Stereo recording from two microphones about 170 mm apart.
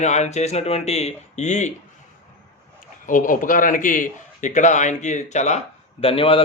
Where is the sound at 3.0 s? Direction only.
50° left (ahead or behind).